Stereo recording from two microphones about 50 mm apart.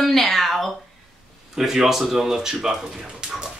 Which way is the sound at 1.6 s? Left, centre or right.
Centre.